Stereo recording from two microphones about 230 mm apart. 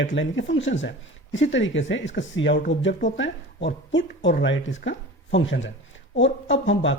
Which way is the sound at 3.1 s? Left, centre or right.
Left.